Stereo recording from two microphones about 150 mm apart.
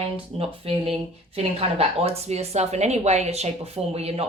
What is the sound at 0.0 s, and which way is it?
Speech, 40° right (ahead or behind).